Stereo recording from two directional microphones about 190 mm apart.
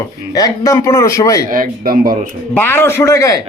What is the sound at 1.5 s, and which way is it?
Speech, 50° right (ahead or behind).